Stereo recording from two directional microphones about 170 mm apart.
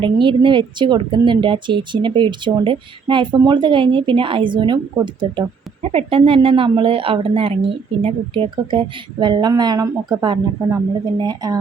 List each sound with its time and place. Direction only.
0.0 s speech: 30° right (ahead or behind)